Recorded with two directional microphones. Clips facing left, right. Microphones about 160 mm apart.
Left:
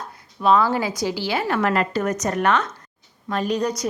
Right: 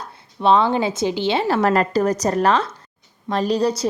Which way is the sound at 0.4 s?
25° right (ahead or behind).